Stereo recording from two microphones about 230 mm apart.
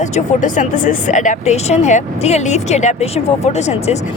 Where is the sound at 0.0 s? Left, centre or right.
Left.